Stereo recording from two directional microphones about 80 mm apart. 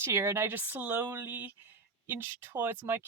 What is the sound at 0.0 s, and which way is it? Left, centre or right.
Speech, right.